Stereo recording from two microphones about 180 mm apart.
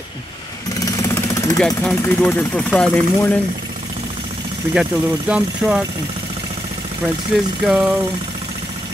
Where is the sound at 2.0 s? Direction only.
10° left (ahead or behind).